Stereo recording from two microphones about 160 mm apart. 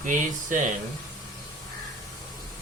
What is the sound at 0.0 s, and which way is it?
Speech, 55° right (ahead or behind).